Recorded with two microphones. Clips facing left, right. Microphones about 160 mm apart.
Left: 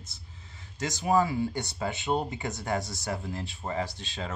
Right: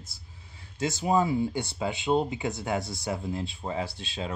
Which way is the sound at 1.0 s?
20° right (ahead or behind).